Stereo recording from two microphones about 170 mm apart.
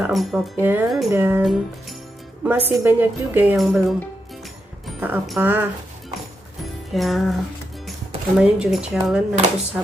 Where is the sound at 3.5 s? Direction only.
Centre (ahead or behind).